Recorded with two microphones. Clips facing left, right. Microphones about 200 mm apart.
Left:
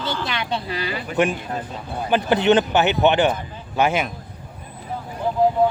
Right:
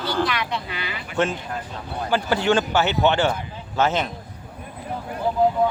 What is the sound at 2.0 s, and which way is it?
Speech, 20° left (ahead or behind).